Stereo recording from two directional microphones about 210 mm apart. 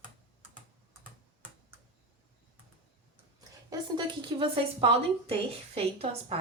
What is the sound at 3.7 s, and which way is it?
A woman's voice, 20° right (ahead or behind).